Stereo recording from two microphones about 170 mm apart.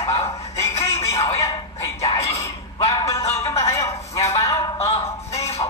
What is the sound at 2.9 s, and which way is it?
Music, 20° left (ahead or behind).